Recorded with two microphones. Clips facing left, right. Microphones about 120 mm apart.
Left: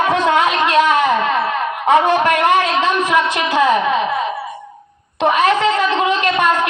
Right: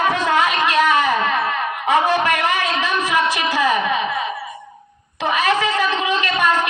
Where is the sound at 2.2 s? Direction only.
55° left (ahead or behind).